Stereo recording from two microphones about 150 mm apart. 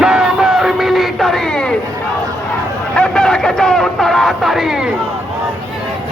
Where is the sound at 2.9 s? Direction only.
5° left (ahead or behind).